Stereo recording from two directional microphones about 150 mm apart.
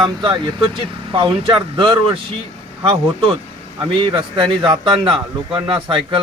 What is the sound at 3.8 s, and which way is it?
Speech, 30° right (ahead or behind).